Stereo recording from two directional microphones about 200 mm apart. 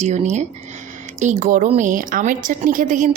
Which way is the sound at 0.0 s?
35° right (ahead or behind).